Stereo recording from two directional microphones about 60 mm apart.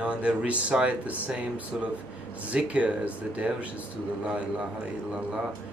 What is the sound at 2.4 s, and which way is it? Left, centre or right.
A man's voice, right.